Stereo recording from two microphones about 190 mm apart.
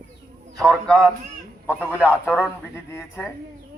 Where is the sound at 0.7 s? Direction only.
5° left (ahead or behind).